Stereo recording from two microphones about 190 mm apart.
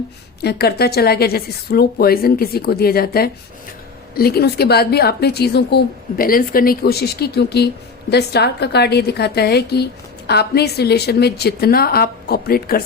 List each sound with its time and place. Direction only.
0.4 s a woman's voice: 55° left (ahead or behind)